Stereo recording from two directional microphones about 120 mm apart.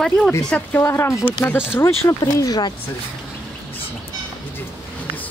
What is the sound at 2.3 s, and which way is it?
Speech, 35° left (ahead or behind).